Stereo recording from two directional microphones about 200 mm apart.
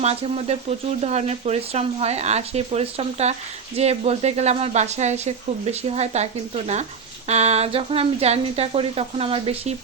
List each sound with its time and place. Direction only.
0.0 s speech: 30° right (ahead or behind)